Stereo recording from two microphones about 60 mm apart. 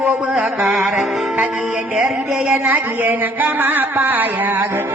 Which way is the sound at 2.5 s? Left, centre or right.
Right.